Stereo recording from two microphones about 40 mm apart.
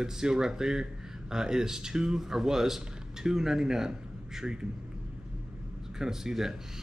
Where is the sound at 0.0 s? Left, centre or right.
Centre.